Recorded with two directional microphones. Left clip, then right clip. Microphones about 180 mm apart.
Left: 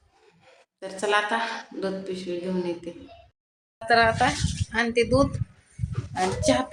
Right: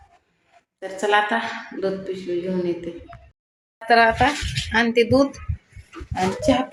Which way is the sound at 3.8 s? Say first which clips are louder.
Right 4 dB; 10° right (ahead or behind).